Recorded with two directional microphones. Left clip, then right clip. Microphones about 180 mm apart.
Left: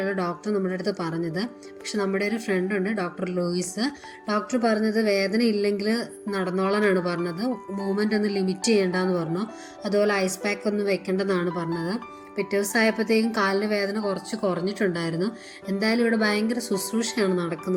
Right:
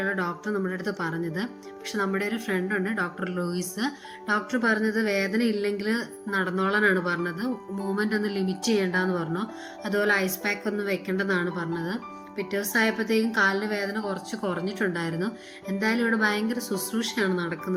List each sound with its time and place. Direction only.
0.0 s speech: 10° left (ahead or behind)